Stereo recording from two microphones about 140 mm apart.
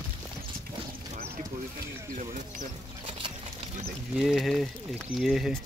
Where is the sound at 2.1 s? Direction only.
65° right (ahead or behind).